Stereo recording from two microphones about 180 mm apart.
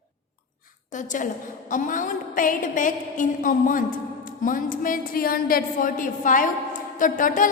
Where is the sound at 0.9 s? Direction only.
45° left (ahead or behind).